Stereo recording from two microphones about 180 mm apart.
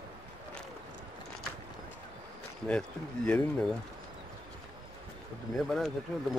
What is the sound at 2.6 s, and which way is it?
Speech, 5° left (ahead or behind).